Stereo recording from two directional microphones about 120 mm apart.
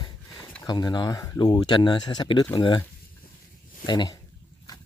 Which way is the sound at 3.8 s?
35° left (ahead or behind).